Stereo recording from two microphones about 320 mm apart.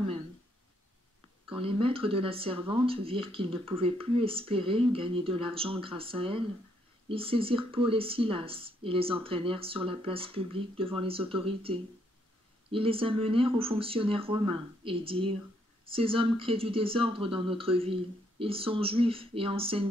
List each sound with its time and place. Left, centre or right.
1.5 s speech: centre